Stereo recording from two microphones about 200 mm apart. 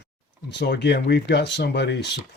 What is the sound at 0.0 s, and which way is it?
Speech, 55° left (ahead or behind).